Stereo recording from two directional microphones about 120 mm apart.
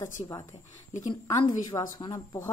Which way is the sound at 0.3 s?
30° left (ahead or behind).